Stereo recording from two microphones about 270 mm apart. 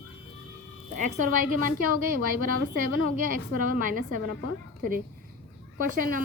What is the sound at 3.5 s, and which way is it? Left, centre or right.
Speech, right.